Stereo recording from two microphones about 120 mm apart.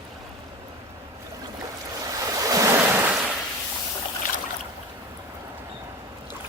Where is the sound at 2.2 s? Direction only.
30° right (ahead or behind).